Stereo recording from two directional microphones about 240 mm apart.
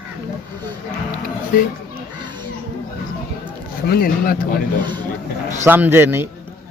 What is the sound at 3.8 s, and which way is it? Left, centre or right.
Speech, left.